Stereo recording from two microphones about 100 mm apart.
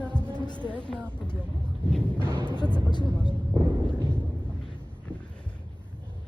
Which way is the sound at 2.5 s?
50° left (ahead or behind).